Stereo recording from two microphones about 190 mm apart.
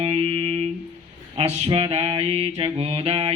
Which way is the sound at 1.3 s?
30° right (ahead or behind).